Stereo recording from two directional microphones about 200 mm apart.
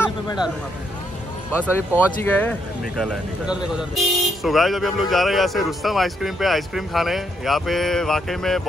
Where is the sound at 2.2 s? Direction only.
10° left (ahead or behind).